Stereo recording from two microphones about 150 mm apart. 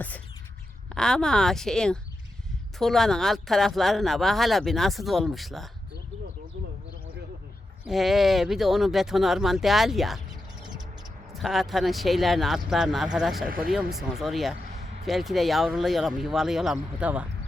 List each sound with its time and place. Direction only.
0.9 s speech: 5° left (ahead or behind)
7.9 s speech: centre (ahead or behind)
11.3 s speech: centre (ahead or behind)
13.5 s speech: 70° right (ahead or behind)
13.9 s speech: centre (ahead or behind)